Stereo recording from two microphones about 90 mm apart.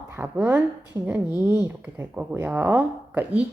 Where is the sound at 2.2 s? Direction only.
20° right (ahead or behind).